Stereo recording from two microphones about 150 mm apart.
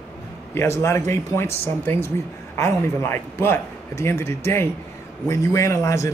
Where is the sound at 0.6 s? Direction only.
20° left (ahead or behind).